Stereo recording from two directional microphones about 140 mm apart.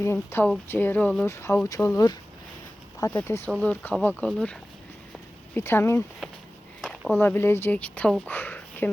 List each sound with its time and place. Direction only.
0.0 s speech: 15° left (ahead or behind)
3.1 s speech: 15° left (ahead or behind)
5.5 s speech: 15° left (ahead or behind)
7.2 s speech: 15° left (ahead or behind)